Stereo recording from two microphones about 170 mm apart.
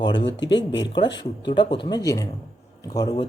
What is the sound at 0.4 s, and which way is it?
Speech, 25° left (ahead or behind).